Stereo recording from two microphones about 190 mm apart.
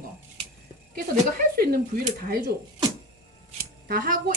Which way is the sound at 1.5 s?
55° right (ahead or behind).